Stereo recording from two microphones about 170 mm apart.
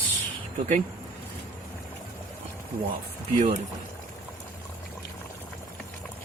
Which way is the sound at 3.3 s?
45° right (ahead or behind).